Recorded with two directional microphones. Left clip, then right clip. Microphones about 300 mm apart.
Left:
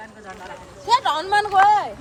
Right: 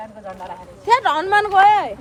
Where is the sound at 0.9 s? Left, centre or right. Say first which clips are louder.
Right 3 dB; right.